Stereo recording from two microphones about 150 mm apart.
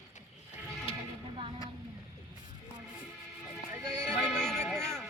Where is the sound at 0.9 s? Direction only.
35° left (ahead or behind).